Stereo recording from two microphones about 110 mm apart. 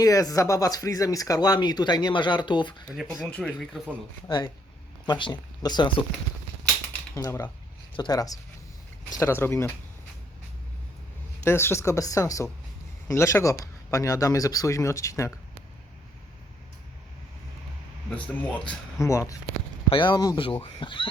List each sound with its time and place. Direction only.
0.0 s speech: 35° left (ahead or behind)
3.2 s speech: 5° left (ahead or behind)
5.0 s speech: 45° left (ahead or behind)
7.2 s speech: 30° left (ahead or behind)
9.2 s speech: 20° left (ahead or behind)
11.4 s speech: 25° left (ahead or behind)
18.1 s speech: 10° left (ahead or behind)
18.9 s speech: 25° left (ahead or behind)
19.9 s speech: 45° left (ahead or behind)
20.4 s speech: 55° left (ahead or behind)